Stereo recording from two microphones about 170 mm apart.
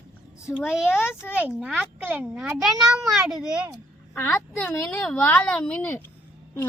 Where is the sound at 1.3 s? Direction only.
5° right (ahead or behind).